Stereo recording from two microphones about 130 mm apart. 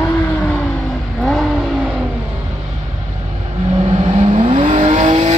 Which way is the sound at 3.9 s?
55° right (ahead or behind).